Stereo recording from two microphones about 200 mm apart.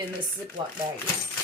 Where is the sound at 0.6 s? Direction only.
25° right (ahead or behind).